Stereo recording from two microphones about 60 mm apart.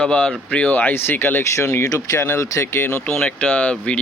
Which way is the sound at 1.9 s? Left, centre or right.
Left.